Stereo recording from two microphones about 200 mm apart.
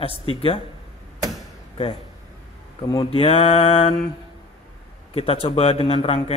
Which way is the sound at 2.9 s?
30° left (ahead or behind).